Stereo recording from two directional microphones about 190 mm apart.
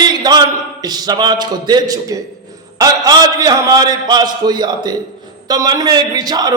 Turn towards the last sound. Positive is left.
turn(degrees=-20)  # may be behind; listen again after turning